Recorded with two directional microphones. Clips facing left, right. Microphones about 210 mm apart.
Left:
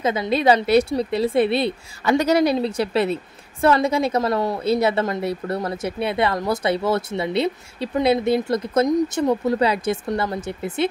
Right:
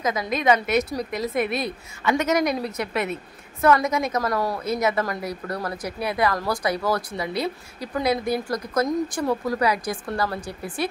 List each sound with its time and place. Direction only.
0.0 s a woman's voice: 30° left (ahead or behind)